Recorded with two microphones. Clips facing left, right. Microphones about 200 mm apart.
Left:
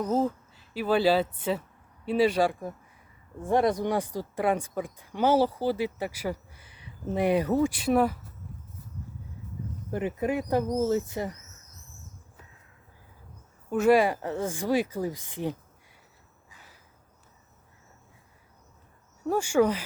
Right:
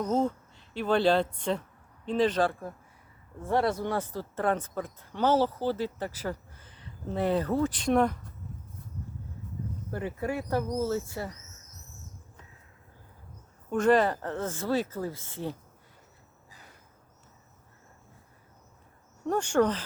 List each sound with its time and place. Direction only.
0.0 s speech: 5° left (ahead or behind)
9.9 s speech: 20° left (ahead or behind)
13.7 s speech: 10° left (ahead or behind)
19.2 s speech: 5° left (ahead or behind)